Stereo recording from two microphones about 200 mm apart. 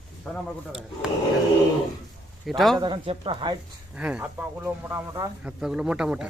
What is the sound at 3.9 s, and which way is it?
Speech, 5° right (ahead or behind).